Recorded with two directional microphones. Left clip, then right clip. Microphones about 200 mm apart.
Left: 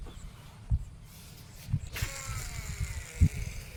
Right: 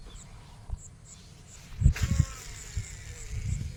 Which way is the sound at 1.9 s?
20° left (ahead or behind).